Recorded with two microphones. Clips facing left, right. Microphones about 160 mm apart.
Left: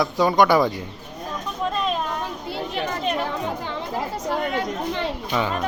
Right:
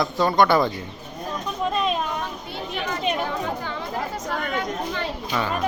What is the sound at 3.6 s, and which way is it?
Speech, 30° left (ahead or behind).